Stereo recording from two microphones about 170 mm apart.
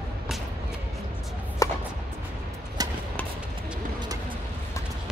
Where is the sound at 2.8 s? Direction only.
20° right (ahead or behind).